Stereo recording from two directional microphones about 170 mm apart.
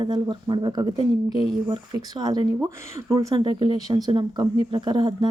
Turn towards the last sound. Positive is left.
turn(degrees=-25)  # may be behind; listen again after turning